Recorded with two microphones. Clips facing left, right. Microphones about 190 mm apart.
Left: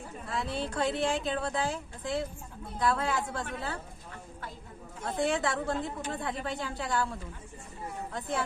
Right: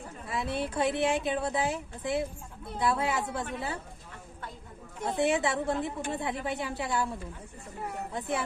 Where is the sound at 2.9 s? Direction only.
20° right (ahead or behind).